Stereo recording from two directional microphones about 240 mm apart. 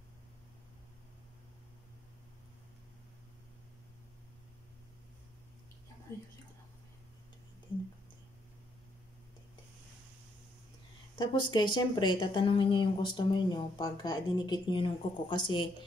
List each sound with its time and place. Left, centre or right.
11.1 s a woman's voice: centre